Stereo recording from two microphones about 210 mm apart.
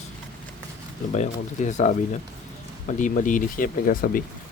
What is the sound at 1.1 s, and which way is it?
Speech, 35° left (ahead or behind).